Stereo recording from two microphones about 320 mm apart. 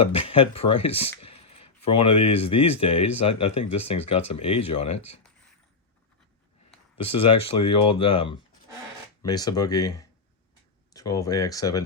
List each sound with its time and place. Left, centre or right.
0.0 s speech: centre
7.1 s speech: centre